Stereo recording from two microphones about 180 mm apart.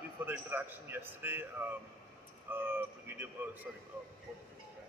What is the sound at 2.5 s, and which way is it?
A man's voice, 10° right (ahead or behind).